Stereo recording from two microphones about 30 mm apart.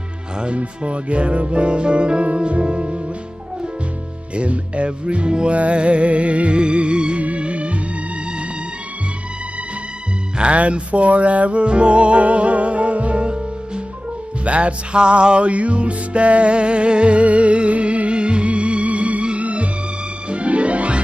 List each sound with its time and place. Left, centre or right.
0.6 s music: right
4.4 s music: right
10.5 s music: right
14.4 s music: right
15.0 s music: right